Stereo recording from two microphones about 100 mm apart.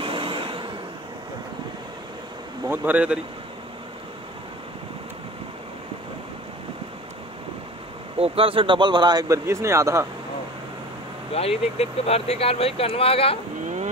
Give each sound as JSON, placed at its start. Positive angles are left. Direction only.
{"t": 0.0, "sound": "vehicle", "side_deg": -60}
{"t": 2.7, "sound": "speech", "side_deg": -15}
{"t": 8.2, "sound": "speech", "side_deg": -65}
{"t": 9.3, "sound": "speech", "side_deg": -30}
{"t": 11.3, "sound": "speech", "side_deg": 85}